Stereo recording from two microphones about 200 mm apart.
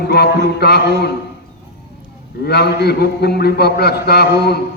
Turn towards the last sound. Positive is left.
turn(degrees=55)  # may be behind; listen again after turning